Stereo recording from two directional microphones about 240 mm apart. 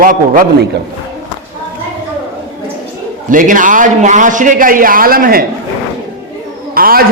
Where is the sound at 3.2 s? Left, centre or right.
Right.